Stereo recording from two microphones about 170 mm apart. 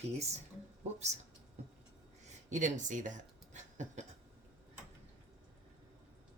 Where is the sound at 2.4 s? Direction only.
45° right (ahead or behind).